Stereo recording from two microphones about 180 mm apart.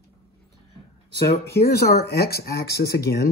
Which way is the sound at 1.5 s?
60° left (ahead or behind).